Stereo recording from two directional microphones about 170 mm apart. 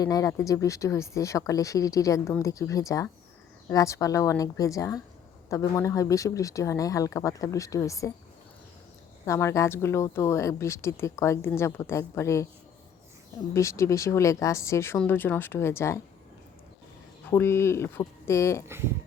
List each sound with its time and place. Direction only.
0.0 s speech: 20° left (ahead or behind)
9.2 s a woman's voice: 20° left (ahead or behind)
13.5 s a woman's voice: 15° left (ahead or behind)
17.3 s a woman's voice: 15° left (ahead or behind)